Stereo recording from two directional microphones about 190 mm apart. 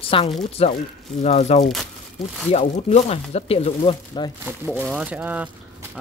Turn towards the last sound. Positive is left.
turn(degrees=-10)  # may be behind; listen again after turning